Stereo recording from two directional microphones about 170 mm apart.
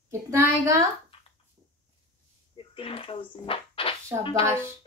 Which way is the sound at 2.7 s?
30° left (ahead or behind).